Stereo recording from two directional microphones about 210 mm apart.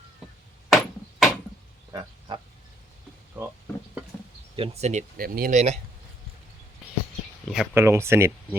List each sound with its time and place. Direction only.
0.2 s chop: centre (ahead or behind)
0.7 s hammer: centre (ahead or behind)
1.9 s a sound: 20° right (ahead or behind)
4.5 s speech: 30° right (ahead or behind)
7.4 s speech: centre (ahead or behind)